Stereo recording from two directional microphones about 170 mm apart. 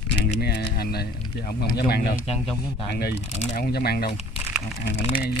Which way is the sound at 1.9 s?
65° left (ahead or behind).